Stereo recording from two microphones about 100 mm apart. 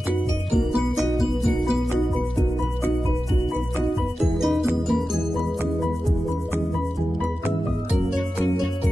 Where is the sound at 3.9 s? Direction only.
Centre (ahead or behind).